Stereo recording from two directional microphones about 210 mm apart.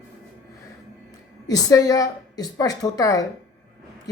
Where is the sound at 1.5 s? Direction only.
15° left (ahead or behind).